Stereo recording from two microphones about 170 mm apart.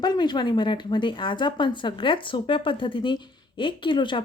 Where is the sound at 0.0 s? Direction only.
25° left (ahead or behind).